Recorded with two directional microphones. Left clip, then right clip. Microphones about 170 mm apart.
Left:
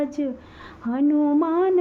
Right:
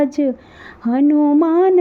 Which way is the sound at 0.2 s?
30° right (ahead or behind).